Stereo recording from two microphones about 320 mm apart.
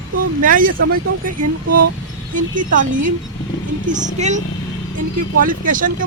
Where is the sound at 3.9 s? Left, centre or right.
Right.